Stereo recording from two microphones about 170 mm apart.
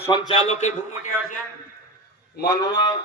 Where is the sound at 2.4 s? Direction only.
70° left (ahead or behind).